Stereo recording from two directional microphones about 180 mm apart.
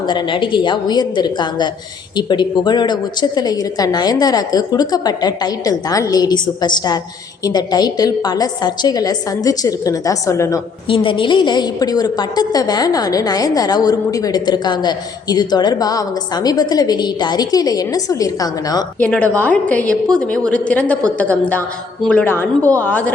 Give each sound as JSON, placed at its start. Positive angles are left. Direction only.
{"t": 0.0, "sound": "a woman's voice", "side_deg": 25}
{"t": 10.8, "sound": "a woman's voice", "side_deg": 30}
{"t": 19.0, "sound": "a woman's voice", "side_deg": 5}